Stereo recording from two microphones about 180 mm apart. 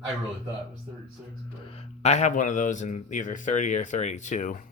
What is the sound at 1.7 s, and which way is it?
A man's voice, 35° left (ahead or behind).